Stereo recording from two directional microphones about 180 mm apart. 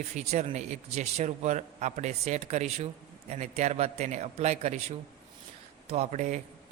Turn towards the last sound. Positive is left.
turn(degrees=-40)  # may be behind; listen again after turning